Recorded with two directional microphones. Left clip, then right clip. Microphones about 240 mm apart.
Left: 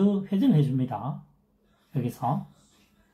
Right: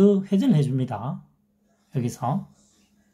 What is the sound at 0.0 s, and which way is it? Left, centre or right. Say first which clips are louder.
Speech: right 5 dB; right.